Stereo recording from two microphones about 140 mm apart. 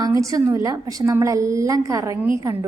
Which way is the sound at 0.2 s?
25° right (ahead or behind).